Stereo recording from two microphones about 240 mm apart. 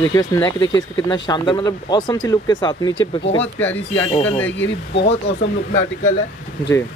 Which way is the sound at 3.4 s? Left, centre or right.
Centre.